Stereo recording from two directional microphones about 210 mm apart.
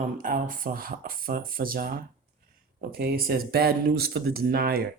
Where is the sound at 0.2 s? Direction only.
40° right (ahead or behind).